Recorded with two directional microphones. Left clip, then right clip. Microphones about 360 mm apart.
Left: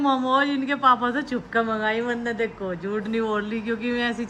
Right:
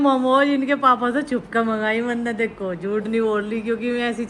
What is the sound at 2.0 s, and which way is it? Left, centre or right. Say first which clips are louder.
Speech: right 2 dB; right.